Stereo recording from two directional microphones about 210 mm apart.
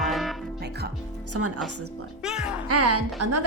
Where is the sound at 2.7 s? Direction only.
90° right.